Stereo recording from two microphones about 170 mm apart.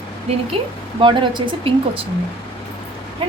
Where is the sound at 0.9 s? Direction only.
30° right (ahead or behind).